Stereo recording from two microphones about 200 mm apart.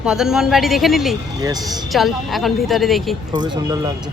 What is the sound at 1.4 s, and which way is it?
Speech, 20° right (ahead or behind).